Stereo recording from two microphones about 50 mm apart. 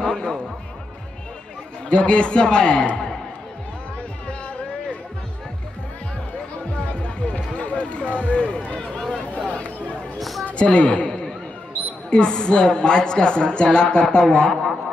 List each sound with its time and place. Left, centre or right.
0.0 s music: centre
1.9 s a woman's voice: centre
6.9 s run: left
8.8 s a sound: centre
9.4 s a sound: left
12.1 s a woman's voice: centre